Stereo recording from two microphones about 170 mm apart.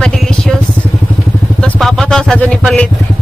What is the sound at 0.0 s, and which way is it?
Vehicle, 5° left (ahead or behind).